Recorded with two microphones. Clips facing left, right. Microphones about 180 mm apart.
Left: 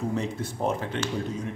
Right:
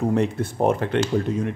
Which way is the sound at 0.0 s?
60° right (ahead or behind).